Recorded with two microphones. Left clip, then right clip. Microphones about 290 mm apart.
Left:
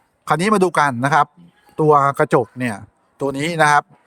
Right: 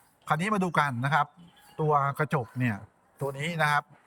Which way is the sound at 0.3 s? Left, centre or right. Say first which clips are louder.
Left 12 dB; centre.